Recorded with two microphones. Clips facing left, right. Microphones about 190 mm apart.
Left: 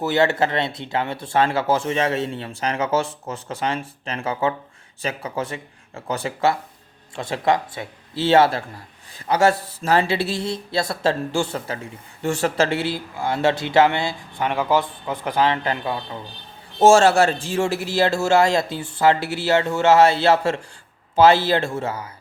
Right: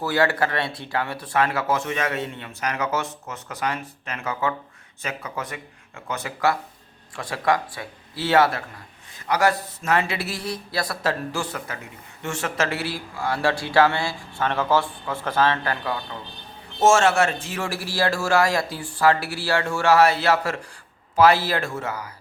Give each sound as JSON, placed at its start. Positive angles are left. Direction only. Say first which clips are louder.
{"t": 0.0, "sound": "a man's voice", "louder": "left 3 dB", "side_deg": 25}
{"t": 16.8, "sound": "a man's voice", "louder": "left 4 dB", "side_deg": 35}